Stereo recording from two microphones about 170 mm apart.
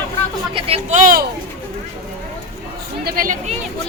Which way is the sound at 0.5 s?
35° right (ahead or behind).